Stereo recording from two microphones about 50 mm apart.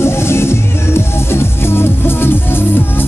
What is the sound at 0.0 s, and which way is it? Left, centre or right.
Music, left.